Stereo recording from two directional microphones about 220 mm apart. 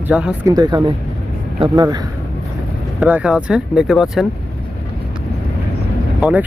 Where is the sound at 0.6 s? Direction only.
20° right (ahead or behind).